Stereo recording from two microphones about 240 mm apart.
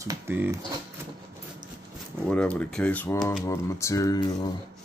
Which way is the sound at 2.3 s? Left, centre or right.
Centre.